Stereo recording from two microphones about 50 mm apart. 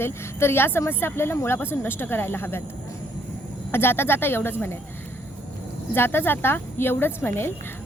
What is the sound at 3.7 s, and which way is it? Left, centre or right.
Speech, left.